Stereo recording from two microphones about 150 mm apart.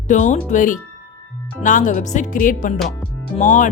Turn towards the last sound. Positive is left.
turn(degrees=55)  # may be behind; listen again after turning